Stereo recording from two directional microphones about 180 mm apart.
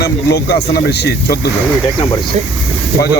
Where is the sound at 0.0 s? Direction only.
65° left (ahead or behind).